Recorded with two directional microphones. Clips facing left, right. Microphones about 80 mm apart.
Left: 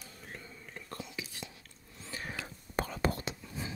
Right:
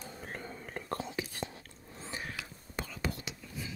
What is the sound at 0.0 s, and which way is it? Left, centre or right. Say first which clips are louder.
Whispering: right 6 dB; right.